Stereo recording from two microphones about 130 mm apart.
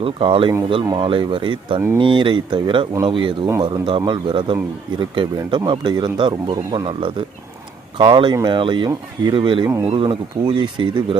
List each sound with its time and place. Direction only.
0.0 s speech: 40° right (ahead or behind)
7.9 s speech: 40° right (ahead or behind)